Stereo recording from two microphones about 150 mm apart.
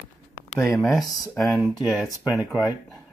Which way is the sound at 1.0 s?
25° left (ahead or behind).